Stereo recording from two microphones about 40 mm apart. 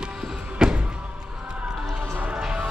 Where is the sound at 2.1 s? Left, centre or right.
Right.